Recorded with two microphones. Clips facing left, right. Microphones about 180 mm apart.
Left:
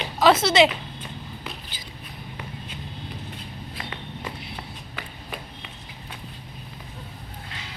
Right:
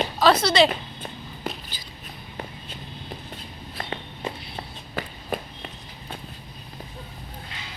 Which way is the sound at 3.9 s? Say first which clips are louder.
Right 3 dB; 30° right (ahead or behind).